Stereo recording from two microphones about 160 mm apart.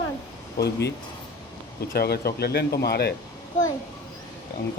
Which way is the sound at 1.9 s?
75° left (ahead or behind).